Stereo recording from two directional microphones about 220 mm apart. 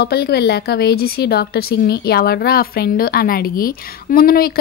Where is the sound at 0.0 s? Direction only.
50° left (ahead or behind).